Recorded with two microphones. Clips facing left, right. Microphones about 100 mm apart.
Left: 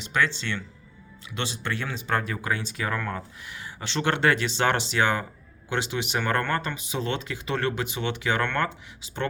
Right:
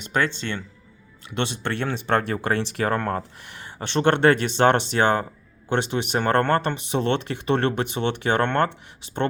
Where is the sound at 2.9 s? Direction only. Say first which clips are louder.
Right 5 dB; 35° right (ahead or behind).